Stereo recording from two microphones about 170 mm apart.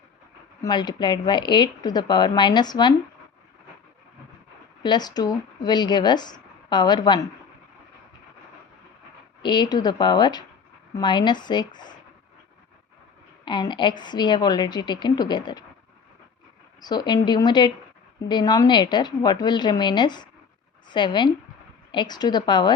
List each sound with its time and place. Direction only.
0.6 s a woman's voice: 25° left (ahead or behind)
4.8 s speech: 25° left (ahead or behind)
9.4 s a woman's voice: 25° left (ahead or behind)
13.4 s a woman's voice: 25° left (ahead or behind)
16.8 s a woman's voice: 25° left (ahead or behind)